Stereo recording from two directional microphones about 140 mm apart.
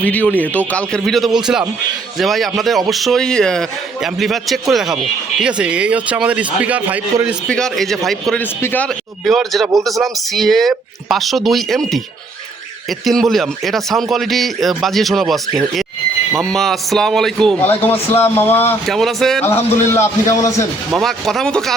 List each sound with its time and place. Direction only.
0.0 s a man's voice: 10° left (ahead or behind); by 7.3 s 10° right (ahead or behind)
7.4 s speech: 5° left (ahead or behind)
9.2 s speech: centre (ahead or behind)
13.1 s speech: centre (ahead or behind)
17.8 s speech: 15° left (ahead or behind)
18.9 s speech: centre (ahead or behind)
19.4 s a man's voice: 15° left (ahead or behind)
20.9 s speech: centre (ahead or behind)